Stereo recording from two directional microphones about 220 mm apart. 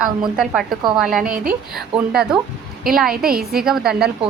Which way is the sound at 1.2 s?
40° right (ahead or behind).